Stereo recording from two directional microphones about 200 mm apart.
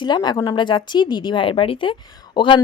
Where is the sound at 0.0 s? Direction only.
20° left (ahead or behind).